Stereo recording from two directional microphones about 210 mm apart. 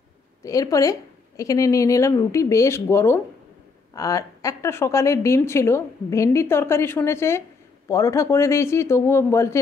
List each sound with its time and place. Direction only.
0.4 s a woman's voice: 15° left (ahead or behind)